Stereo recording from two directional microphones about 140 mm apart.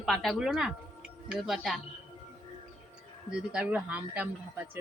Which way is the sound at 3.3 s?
5° right (ahead or behind).